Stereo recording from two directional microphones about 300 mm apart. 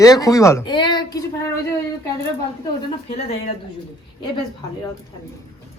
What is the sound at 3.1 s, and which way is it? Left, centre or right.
Speech, centre.